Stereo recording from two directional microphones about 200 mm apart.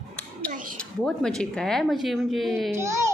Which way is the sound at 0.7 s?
5° left (ahead or behind).